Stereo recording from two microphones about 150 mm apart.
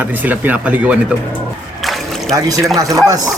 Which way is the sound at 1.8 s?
Centre (ahead or behind).